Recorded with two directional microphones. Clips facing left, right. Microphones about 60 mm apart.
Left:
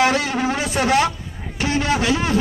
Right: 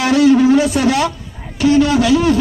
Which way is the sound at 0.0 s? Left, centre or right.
Left.